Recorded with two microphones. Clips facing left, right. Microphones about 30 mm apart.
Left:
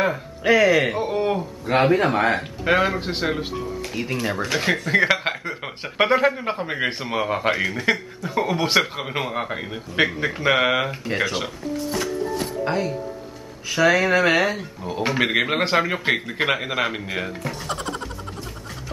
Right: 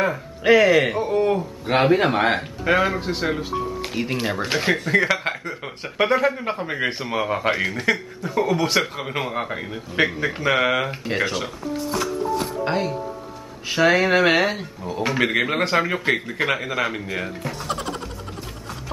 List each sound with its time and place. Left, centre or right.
0.4 s speech: centre
1.0 s a man's voice: centre
1.7 s speech: centre
2.6 s speech: centre
3.9 s speech: centre
4.5 s speech: centre
4.9 s speech: centre
11.7 s music: centre
12.5 s speech: centre
14.9 s speech: centre
17.4 s speech: centre